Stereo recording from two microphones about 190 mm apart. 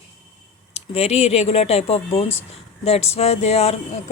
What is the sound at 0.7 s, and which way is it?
Speech, 35° left (ahead or behind).